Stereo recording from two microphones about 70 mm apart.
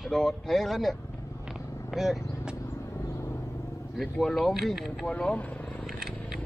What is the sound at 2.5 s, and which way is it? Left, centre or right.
Vehicle, left.